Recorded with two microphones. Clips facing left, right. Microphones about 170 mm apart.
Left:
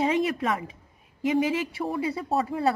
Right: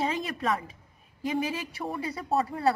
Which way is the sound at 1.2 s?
25° left (ahead or behind).